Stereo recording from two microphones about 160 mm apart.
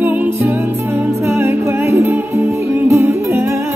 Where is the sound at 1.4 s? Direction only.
15° right (ahead or behind).